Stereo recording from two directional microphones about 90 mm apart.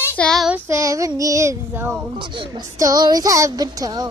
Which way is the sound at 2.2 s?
65° right (ahead or behind).